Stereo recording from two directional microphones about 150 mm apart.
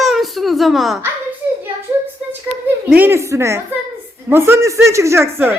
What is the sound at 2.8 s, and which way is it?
A woman's voice, 15° right (ahead or behind).